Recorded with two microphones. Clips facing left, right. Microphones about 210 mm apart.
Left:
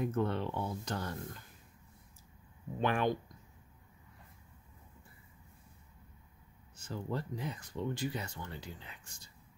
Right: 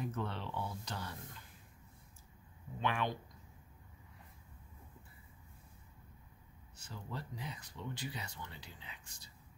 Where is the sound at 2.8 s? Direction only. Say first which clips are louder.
Left 5 dB; 45° left (ahead or behind).